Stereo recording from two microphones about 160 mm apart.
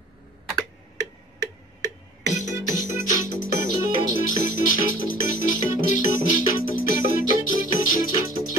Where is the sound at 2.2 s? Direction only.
50° left (ahead or behind).